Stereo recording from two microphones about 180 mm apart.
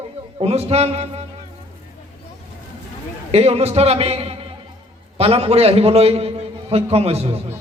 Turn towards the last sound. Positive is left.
turn(degrees=-35)  # may be behind; listen again after turning